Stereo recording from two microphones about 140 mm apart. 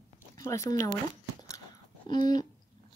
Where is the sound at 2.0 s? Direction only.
30° left (ahead or behind).